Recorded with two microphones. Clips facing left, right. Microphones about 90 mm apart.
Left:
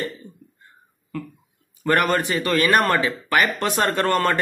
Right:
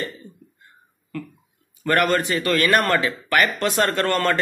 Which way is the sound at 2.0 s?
20° left (ahead or behind).